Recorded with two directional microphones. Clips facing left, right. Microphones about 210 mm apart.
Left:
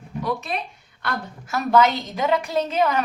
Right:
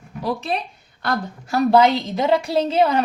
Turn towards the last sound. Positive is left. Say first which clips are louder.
# right 4 dB
turn(degrees=-30)  # may be behind; listen again after turning